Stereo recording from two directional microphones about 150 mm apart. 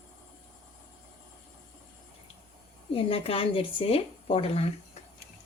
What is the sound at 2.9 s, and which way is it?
A woman's voice, 40° left (ahead or behind).